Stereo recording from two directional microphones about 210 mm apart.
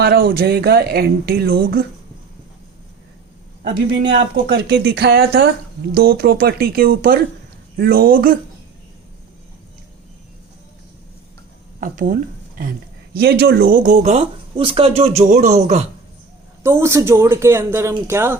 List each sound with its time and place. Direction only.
0.0 s speech: 45° right (ahead or behind)
4.7 s speech: 50° right (ahead or behind)
11.8 s speech: 40° right (ahead or behind)
13.1 s speech: 50° right (ahead or behind); by 15.9 s 30° right (ahead or behind)
16.6 s speech: 15° right (ahead or behind)